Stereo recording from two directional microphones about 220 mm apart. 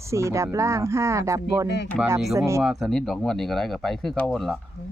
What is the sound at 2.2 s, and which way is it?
Speech, centre (ahead or behind).